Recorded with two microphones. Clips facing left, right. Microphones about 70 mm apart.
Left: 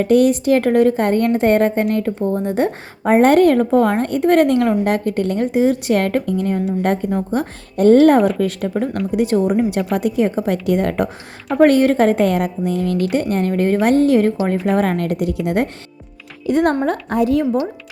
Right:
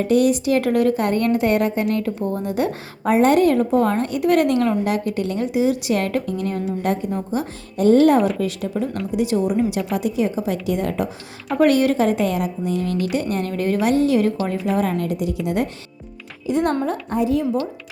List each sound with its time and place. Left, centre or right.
0.0 s a woman's voice: left
11.6 s a woman's voice: left
13.3 s a woman's voice: left
14.8 s a woman's voice: left
17.4 s a woman's voice: left